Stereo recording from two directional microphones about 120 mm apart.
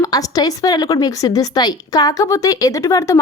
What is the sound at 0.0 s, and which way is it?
A woman's voice, 30° left (ahead or behind).